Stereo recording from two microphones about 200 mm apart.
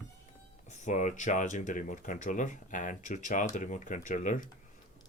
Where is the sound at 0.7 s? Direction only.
35° left (ahead or behind).